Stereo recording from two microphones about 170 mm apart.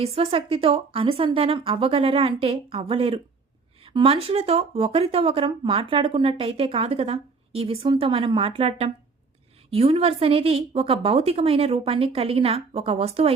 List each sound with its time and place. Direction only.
0.0 s speech: 35° right (ahead or behind)